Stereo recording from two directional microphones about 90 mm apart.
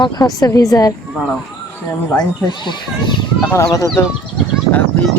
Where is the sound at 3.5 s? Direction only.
35° left (ahead or behind).